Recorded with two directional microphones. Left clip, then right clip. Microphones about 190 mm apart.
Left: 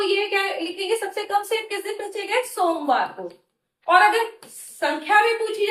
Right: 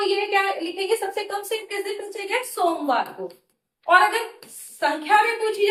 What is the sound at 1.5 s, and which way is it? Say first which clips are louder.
A woman's voice: left 2 dB; 15° right (ahead or behind).